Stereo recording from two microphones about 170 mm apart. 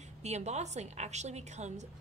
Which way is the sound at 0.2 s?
40° right (ahead or behind).